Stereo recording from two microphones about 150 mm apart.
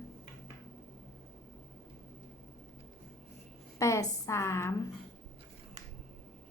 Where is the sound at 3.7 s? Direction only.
20° left (ahead or behind).